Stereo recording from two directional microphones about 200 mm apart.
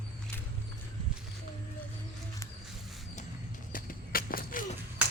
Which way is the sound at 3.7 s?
45° left (ahead or behind).